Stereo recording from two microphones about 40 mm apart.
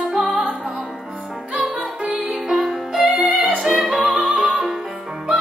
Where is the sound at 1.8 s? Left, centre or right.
Centre.